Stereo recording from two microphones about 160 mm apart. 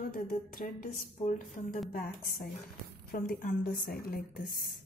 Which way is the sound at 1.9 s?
70° left (ahead or behind).